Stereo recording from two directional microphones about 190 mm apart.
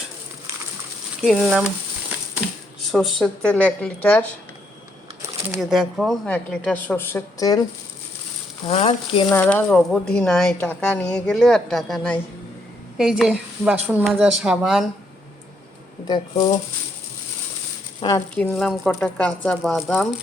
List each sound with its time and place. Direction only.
1.2 s speech: 5° right (ahead or behind)
2.9 s speech: centre (ahead or behind)
5.5 s speech: centre (ahead or behind); by 7.6 s 20° left (ahead or behind)
8.6 s frying: 30° left (ahead or behind)
9.3 s speech: 10° left (ahead or behind)
16.0 s frying: 25° left (ahead or behind)
18.0 s frying: 25° left (ahead or behind)
18.3 s speech: 5° left (ahead or behind)